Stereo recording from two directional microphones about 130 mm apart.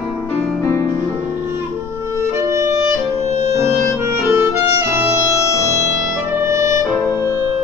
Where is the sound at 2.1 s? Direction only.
20° right (ahead or behind).